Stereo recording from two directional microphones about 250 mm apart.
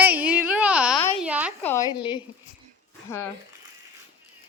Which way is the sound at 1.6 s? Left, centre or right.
Centre.